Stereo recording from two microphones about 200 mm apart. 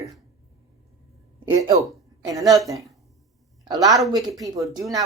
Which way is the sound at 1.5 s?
15° right (ahead or behind).